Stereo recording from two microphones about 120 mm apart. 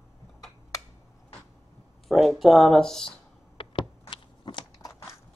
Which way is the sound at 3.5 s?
45° left (ahead or behind).